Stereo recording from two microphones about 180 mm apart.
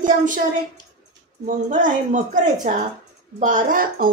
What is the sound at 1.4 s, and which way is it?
Speech, 45° right (ahead or behind).